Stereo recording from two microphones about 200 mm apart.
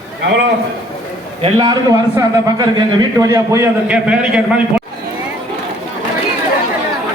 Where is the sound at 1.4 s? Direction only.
20° right (ahead or behind).